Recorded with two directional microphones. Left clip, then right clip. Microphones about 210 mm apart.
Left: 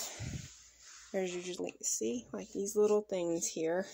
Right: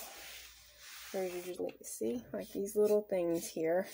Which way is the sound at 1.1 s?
30° left (ahead or behind).